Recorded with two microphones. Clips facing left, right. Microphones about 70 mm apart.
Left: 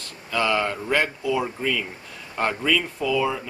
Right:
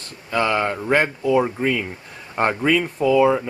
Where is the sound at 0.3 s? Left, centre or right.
Right.